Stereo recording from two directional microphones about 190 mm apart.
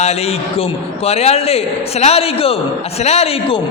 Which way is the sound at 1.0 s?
35° left (ahead or behind).